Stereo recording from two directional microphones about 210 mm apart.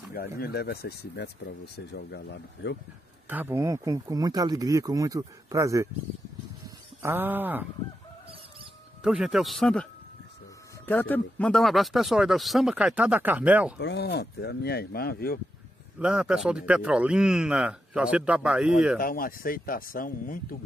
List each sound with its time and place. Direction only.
0.4 s speech: 50° left (ahead or behind)
3.3 s speech: 10° right (ahead or behind)
7.0 s speech: 10° right (ahead or behind)
9.0 s speech: 5° right (ahead or behind)
10.9 s speech: 10° left (ahead or behind); by 13.7 s 5° right (ahead or behind)
13.7 s speech: 50° left (ahead or behind)
16.0 s speech: 5° right (ahead or behind)
18.9 s speech: 45° left (ahead or behind)